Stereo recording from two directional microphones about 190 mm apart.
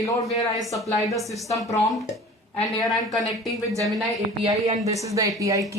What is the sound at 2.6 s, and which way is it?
Speech, centre (ahead or behind).